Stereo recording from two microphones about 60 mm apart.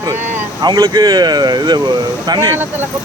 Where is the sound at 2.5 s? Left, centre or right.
Right.